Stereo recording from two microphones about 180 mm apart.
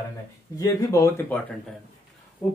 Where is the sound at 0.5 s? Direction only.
15° left (ahead or behind).